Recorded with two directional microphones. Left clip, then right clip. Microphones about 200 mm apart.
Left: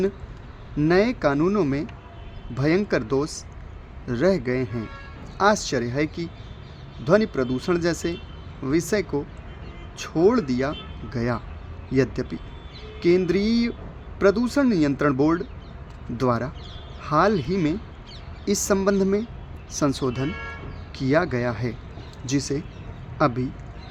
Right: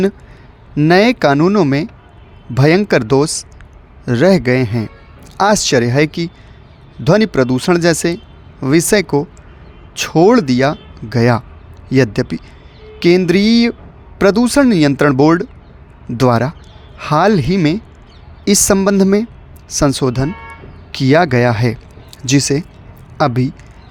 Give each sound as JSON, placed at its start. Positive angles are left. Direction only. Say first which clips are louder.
{"t": 0.8, "sound": "speech", "louder": "right 10 dB", "side_deg": -45}